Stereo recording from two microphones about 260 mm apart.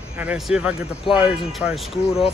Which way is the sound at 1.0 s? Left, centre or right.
Left.